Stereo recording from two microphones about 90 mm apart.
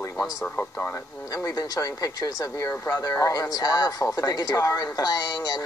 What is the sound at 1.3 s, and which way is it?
Speech, 45° left (ahead or behind).